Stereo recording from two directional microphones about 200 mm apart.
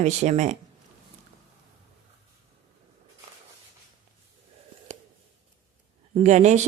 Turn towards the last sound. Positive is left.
turn(degrees=-35)  # may be behind; listen again after turning